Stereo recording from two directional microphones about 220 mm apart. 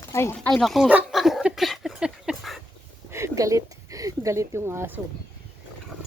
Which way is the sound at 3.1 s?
15° right (ahead or behind).